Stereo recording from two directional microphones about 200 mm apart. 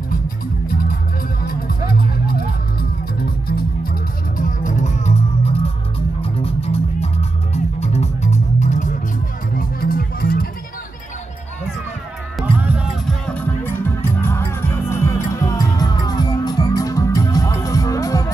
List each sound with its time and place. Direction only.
0.7 s music: 45° left (ahead or behind)
12.4 s music: 5° right (ahead or behind)
13.3 s music: 10° left (ahead or behind)